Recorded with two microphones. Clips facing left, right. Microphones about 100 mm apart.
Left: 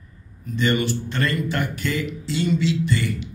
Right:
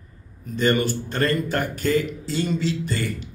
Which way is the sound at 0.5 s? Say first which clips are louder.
Right 1 dB; 40° right (ahead or behind).